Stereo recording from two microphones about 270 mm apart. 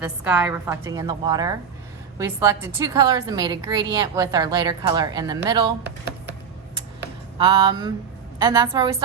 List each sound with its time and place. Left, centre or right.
0.3 s a woman's voice: centre
5.8 s a sound: right
7.3 s a woman's voice: centre